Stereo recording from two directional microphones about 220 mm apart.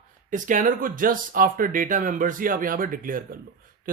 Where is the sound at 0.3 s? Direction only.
35° right (ahead or behind).